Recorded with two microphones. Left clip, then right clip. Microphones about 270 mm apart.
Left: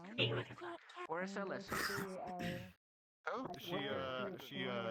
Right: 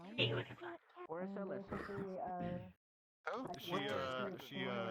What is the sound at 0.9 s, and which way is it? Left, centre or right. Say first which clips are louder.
Speech: left 4 dB; left.